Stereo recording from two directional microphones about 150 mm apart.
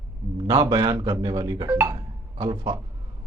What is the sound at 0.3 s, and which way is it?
A man's voice, 25° right (ahead or behind).